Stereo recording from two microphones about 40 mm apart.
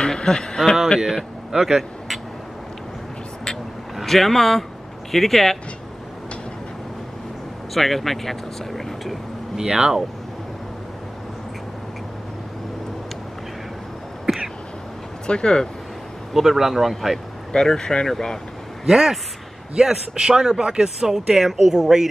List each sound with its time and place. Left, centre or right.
0.0 s speech: centre
1.0 s speech: centre
3.9 s speech: centre
7.7 s speech: centre
9.6 s speech: centre
15.2 s speech: left
16.3 s speech: centre
17.5 s speech: centre
18.9 s speech: centre